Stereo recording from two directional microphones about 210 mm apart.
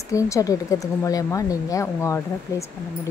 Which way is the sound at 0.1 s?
15° left (ahead or behind).